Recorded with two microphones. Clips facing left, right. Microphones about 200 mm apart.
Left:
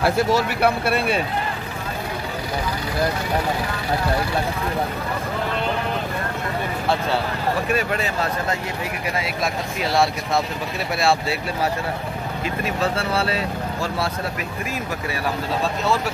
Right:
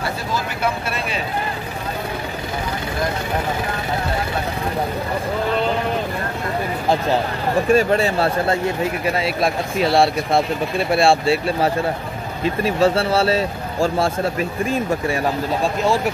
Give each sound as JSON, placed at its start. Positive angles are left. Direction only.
{"t": 0.0, "sound": "speech", "side_deg": 70}
{"t": 7.7, "sound": "speech", "side_deg": -30}